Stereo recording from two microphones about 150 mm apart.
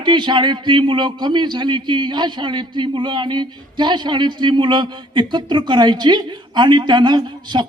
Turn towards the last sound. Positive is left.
turn(degrees=-30)  # may be behind; listen again after turning